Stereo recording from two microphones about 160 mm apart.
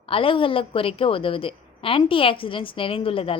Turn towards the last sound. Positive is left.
turn(degrees=35)  # may be behind; listen again after turning